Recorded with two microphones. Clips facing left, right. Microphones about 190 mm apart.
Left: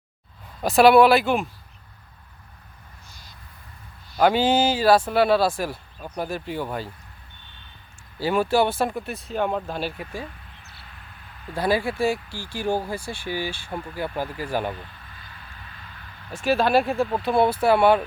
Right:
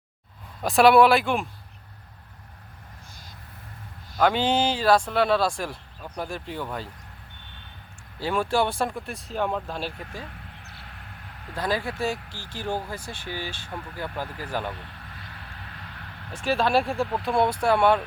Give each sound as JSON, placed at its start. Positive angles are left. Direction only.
{"t": 0.6, "sound": "speech", "side_deg": 0}
{"t": 4.2, "sound": "speech", "side_deg": 5}
{"t": 8.2, "sound": "speech", "side_deg": 5}
{"t": 10.6, "sound": "a sound", "side_deg": -65}
{"t": 11.5, "sound": "speech", "side_deg": 10}
{"t": 14.8, "sound": "vehicle", "side_deg": -65}
{"t": 16.4, "sound": "speech", "side_deg": 5}